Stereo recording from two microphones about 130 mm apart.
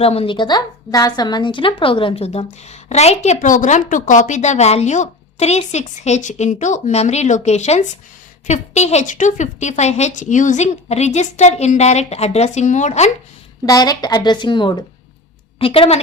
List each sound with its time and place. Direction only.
0.0 s a woman's voice: 50° left (ahead or behind)
13.7 s a woman's voice: 30° left (ahead or behind); by 16.0 s 45° left (ahead or behind)